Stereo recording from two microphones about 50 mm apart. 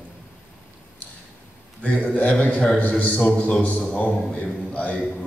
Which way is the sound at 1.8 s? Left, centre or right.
Left.